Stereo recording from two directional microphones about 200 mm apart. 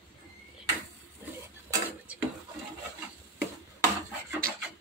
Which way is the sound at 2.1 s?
5° right (ahead or behind).